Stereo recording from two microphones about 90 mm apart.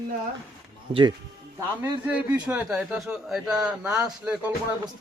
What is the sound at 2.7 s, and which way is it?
A man's voice, 5° right (ahead or behind).